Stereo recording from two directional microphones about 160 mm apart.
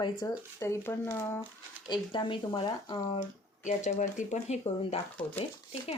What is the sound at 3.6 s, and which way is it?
Speech, 50° left (ahead or behind).